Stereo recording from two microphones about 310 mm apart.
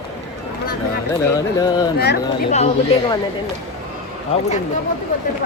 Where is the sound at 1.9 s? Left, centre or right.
Left.